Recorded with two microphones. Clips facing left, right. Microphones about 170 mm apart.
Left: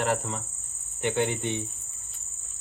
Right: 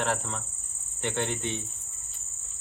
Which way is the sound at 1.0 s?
10° left (ahead or behind).